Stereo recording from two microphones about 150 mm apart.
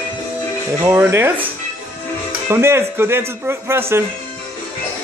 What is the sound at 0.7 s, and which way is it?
Speech, 15° right (ahead or behind).